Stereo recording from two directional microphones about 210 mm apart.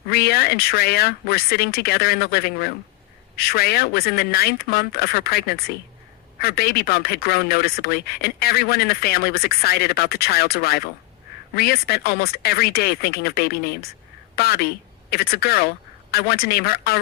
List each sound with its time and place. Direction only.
0.1 s speech: 50° left (ahead or behind)